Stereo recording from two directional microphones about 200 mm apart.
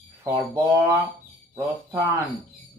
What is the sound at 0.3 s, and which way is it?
Speech, 15° right (ahead or behind).